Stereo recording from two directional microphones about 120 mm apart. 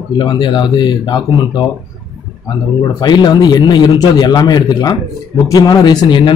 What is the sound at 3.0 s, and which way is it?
A man's voice, 35° left (ahead or behind).